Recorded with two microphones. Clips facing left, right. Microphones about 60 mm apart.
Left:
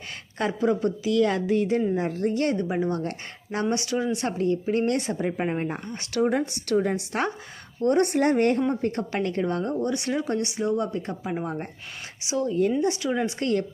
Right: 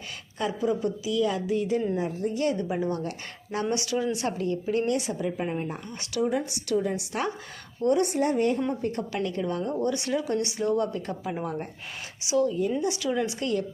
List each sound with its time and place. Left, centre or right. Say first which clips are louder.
0.3 s a woman's voice: left 3 dB; left
2.6 s speech: left 2 dB; left
4.9 s speech: left 2 dB; left
7.9 s speech: left 3 dB; left
8.7 s a woman's voice: left 3 dB; left
9.8 s a woman's voice: left 1 dB; left